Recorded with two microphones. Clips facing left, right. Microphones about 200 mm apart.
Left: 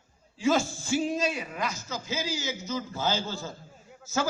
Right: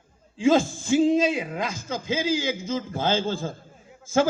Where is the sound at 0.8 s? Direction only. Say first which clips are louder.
Right 8 dB; 90° right.